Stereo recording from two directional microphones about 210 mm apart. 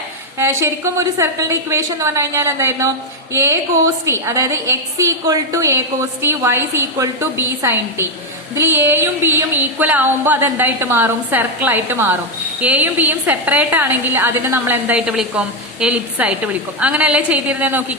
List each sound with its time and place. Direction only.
0.3 s a woman's voice: 10° right (ahead or behind)